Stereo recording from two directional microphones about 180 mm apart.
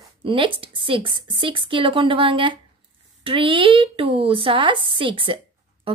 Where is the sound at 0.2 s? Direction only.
30° right (ahead or behind).